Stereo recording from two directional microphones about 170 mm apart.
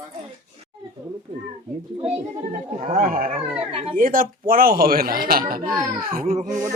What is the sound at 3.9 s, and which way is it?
Speech, 55° right (ahead or behind).